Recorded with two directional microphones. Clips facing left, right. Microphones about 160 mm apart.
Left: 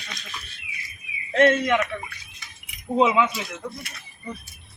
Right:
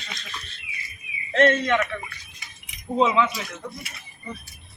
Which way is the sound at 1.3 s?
10° left (ahead or behind).